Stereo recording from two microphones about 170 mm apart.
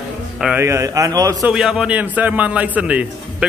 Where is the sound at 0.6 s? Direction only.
15° right (ahead or behind).